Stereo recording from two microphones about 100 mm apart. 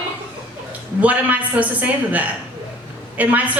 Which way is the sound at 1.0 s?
15° right (ahead or behind).